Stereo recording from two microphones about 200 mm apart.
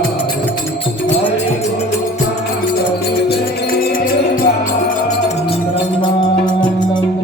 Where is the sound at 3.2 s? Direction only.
45° left (ahead or behind).